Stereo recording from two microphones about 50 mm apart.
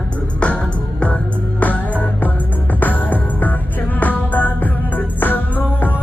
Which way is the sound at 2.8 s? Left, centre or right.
Left.